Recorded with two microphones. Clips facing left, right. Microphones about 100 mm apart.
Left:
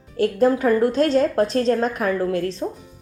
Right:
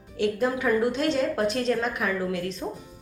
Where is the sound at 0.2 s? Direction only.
40° left (ahead or behind).